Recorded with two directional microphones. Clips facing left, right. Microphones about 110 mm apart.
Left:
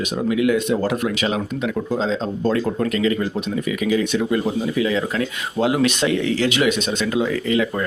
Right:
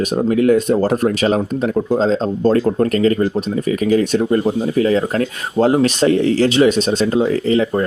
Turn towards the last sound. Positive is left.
turn(degrees=-35)  # may be behind; listen again after turning